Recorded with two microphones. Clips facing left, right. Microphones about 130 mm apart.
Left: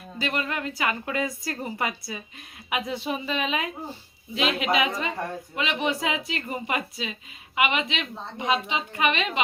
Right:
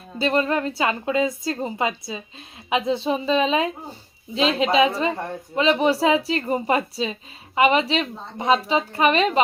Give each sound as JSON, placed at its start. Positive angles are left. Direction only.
{"t": 0.2, "sound": "a woman's voice", "side_deg": -35}
{"t": 0.8, "sound": "a woman's voice", "side_deg": -25}